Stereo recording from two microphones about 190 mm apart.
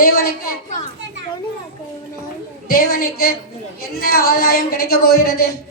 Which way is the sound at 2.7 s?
50° left (ahead or behind).